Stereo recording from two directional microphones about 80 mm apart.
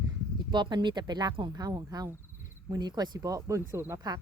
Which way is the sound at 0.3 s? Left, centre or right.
Right.